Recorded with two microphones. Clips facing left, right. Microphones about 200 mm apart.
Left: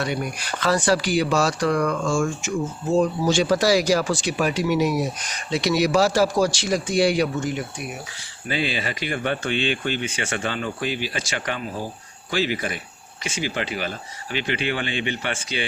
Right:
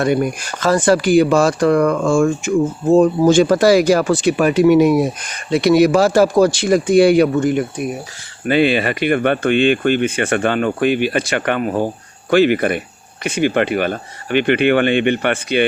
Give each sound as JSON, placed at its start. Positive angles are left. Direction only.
{"t": 0.0, "sound": "speech", "side_deg": -50}